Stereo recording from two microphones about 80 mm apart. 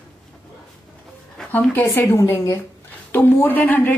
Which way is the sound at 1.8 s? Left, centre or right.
Left.